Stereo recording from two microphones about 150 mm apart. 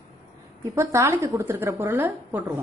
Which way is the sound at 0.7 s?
20° right (ahead or behind).